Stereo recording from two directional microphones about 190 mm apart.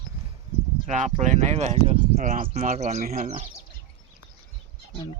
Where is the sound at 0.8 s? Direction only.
40° right (ahead or behind).